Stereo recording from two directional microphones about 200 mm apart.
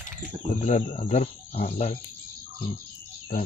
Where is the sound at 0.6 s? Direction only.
35° left (ahead or behind).